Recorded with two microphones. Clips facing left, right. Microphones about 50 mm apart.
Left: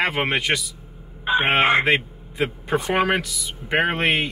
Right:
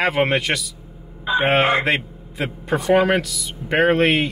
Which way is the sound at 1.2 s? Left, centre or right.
Left.